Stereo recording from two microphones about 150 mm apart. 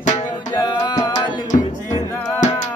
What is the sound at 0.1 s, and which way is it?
Music, 30° left (ahead or behind).